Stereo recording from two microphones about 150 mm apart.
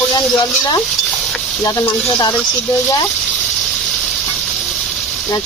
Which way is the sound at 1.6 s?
15° left (ahead or behind).